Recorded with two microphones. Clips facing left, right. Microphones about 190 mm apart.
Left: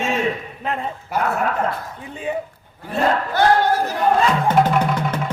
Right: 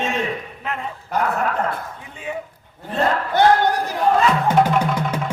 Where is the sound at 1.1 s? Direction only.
10° left (ahead or behind).